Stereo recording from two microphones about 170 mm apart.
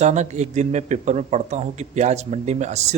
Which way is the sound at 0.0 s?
45° right (ahead or behind).